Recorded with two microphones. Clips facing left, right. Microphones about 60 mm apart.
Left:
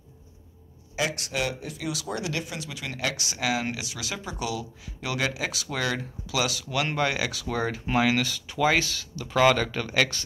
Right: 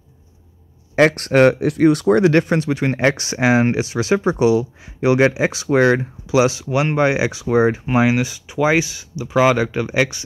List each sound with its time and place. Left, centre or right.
0.9 s speech: right; by 10.2 s centre